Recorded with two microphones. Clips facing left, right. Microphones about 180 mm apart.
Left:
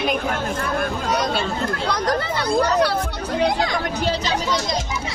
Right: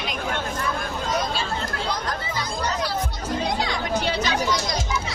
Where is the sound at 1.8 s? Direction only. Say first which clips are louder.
Left 6 dB; 70° left (ahead or behind).